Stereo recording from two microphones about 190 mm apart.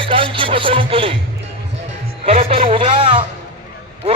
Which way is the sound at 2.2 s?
30° right (ahead or behind).